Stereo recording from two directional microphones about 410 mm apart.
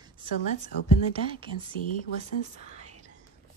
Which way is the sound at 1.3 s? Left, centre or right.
Centre.